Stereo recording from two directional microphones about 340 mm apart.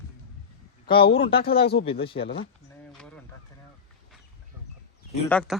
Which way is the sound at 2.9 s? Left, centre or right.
Centre.